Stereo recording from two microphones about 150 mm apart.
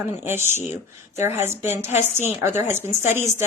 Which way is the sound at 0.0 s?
15° right (ahead or behind).